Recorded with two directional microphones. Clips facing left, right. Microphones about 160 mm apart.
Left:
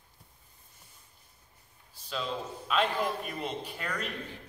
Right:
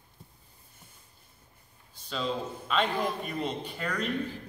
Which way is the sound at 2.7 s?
5° left (ahead or behind).